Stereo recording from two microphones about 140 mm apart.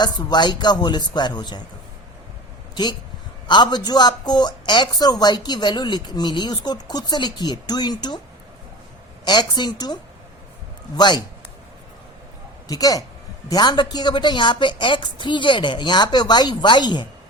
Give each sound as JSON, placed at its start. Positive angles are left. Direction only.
{"t": 0.0, "sound": "a woman's voice", "side_deg": 30}
{"t": 3.4, "sound": "a woman's voice", "side_deg": 30}
{"t": 9.2, "sound": "a woman's voice", "side_deg": 30}
{"t": 12.6, "sound": "a man's voice", "side_deg": 25}